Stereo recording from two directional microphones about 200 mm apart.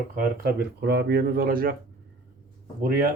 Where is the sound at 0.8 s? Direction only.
55° right (ahead or behind).